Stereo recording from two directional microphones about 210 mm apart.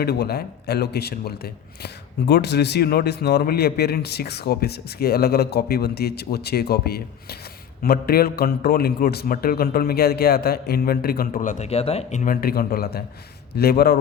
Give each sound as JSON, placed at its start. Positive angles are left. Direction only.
{"t": 0.0, "sound": "speech", "side_deg": 50}